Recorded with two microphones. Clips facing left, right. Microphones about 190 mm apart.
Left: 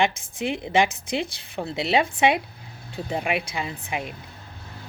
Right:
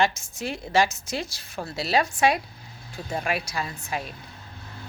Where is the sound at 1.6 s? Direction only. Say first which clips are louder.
Left 2 dB; 20° left (ahead or behind).